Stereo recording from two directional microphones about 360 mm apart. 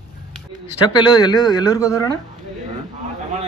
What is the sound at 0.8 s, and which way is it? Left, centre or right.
Speech, centre.